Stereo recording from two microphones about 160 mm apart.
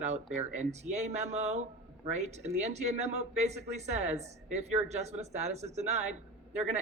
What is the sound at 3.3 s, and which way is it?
Speech, 45° right (ahead or behind).